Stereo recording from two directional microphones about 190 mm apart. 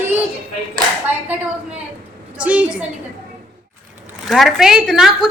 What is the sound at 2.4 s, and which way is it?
Speech, 5° right (ahead or behind).